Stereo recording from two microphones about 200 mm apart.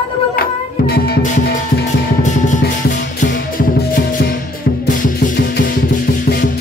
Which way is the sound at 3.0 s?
60° left (ahead or behind).